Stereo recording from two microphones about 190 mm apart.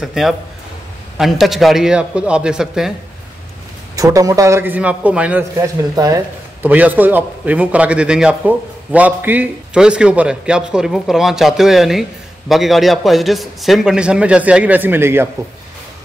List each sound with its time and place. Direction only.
0.0 s a man's voice: centre (ahead or behind)
3.9 s a man's voice: 20° right (ahead or behind)
5.9 s a man's voice: 20° right (ahead or behind)